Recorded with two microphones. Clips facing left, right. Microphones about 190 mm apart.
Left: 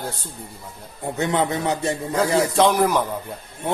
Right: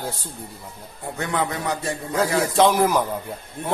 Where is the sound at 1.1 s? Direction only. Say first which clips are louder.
Left 4 dB; 25° left (ahead or behind).